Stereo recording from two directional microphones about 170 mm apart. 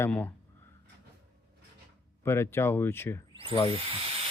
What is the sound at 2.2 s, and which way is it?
Speech, 15° left (ahead or behind).